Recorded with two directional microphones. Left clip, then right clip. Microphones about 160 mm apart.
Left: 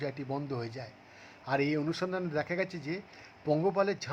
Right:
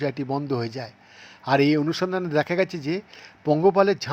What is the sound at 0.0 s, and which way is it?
Speech, 30° right (ahead or behind).